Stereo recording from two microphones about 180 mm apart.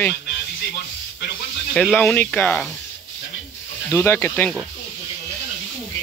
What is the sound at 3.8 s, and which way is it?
Speech, 10° left (ahead or behind).